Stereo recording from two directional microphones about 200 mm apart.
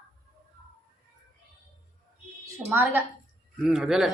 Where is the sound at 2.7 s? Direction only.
10° right (ahead or behind).